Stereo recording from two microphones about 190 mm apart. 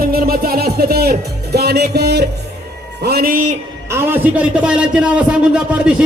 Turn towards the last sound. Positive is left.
turn(degrees=-5)  # may be behind; listen again after turning